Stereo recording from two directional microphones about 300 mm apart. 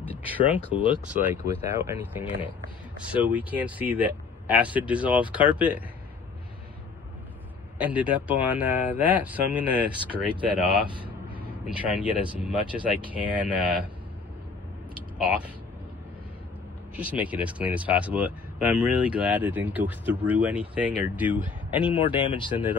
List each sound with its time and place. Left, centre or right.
0.1 s speech: centre
7.8 s speech: centre
15.1 s speech: centre
16.9 s speech: centre
21.7 s speech: centre